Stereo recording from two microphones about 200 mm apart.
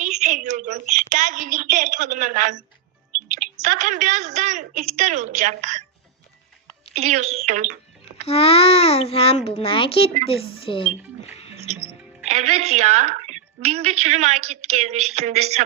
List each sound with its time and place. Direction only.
0.0 s a sound: 35° right (ahead or behind)
3.2 s a woman's voice: 40° right (ahead or behind)
6.9 s a woman's voice: 35° right (ahead or behind)
8.2 s a child's voice: 30° left (ahead or behind)
12.2 s a woman's voice: 35° right (ahead or behind)